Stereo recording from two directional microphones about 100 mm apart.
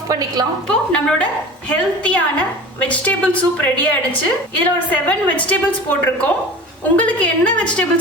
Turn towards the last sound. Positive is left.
turn(degrees=10)  # may be behind; listen again after turning